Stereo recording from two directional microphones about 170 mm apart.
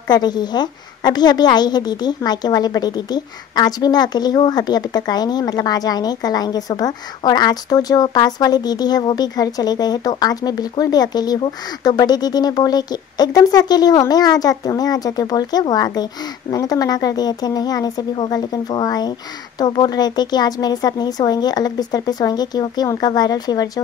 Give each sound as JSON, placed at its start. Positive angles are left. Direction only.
{"t": 0.1, "sound": "a woman's voice", "side_deg": 25}